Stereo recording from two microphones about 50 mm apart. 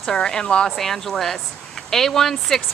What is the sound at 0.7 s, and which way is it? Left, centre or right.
Speech, centre.